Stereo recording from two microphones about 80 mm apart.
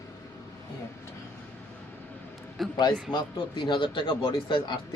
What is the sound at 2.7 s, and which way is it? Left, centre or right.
A man's voice, left.